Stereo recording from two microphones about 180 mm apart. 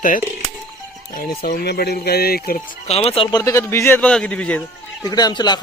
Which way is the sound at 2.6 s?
35° left (ahead or behind).